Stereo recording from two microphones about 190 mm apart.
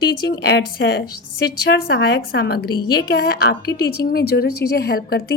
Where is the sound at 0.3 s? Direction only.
60° left (ahead or behind).